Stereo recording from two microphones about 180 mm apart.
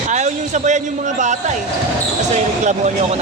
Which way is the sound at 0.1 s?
40° right (ahead or behind).